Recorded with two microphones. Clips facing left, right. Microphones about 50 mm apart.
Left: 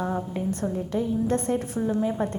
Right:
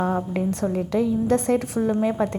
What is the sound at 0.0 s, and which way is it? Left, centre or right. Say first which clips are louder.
A woman's voice: right 5 dB; right.